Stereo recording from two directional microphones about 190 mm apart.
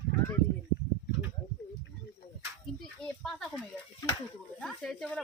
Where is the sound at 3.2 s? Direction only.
Centre (ahead or behind).